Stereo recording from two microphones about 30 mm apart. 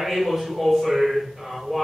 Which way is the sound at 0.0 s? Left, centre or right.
Centre.